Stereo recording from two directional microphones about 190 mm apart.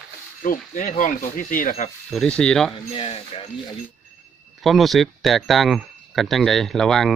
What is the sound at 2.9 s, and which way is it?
Speech, 30° left (ahead or behind).